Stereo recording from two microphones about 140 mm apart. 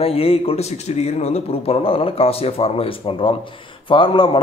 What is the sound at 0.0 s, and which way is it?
A man's voice, 45° left (ahead or behind).